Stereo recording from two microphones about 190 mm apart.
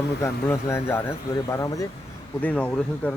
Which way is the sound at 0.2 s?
15° left (ahead or behind).